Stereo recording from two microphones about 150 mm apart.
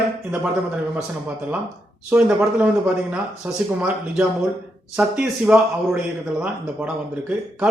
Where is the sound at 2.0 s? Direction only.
5° right (ahead or behind).